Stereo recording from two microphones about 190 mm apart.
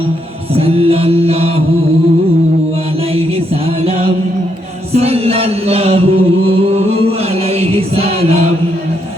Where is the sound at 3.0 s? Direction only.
30° right (ahead or behind).